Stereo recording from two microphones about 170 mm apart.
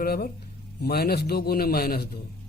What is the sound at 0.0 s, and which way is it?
Speech, 65° left (ahead or behind).